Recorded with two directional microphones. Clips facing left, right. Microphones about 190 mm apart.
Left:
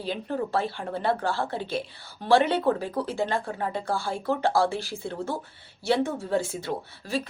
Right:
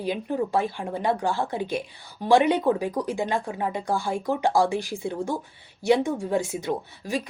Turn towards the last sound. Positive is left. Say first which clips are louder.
# right 1 dB
turn(degrees=-15)  # may be behind; listen again after turning